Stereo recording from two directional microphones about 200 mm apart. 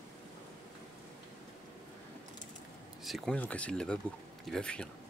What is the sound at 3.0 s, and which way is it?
Speech, centre (ahead or behind).